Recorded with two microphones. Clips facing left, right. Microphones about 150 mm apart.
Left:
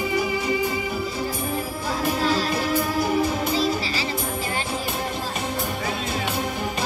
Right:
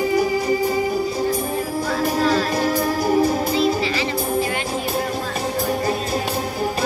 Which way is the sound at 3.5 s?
35° left (ahead or behind).